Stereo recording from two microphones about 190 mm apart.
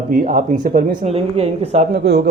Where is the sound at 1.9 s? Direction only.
55° right (ahead or behind).